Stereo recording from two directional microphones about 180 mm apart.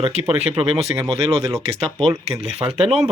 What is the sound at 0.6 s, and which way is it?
Speech, 30° right (ahead or behind).